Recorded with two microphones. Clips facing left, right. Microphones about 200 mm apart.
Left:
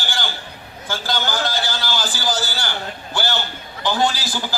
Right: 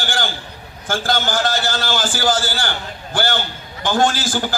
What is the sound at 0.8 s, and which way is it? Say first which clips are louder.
A man's voice: right 4 dB; 50° right (ahead or behind).